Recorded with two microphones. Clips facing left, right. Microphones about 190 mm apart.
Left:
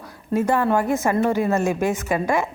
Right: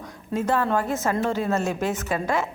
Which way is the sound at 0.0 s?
10° left (ahead or behind).